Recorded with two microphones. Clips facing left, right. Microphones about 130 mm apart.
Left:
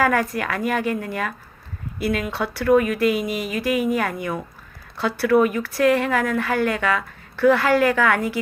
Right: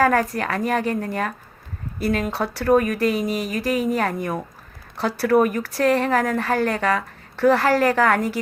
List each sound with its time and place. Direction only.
0.0 s a woman's voice: 30° right (ahead or behind)